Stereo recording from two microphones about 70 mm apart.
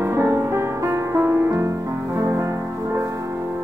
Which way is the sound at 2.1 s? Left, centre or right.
Right.